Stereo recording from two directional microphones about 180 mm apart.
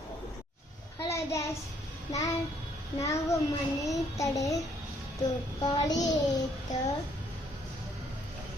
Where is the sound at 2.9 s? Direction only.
35° left (ahead or behind).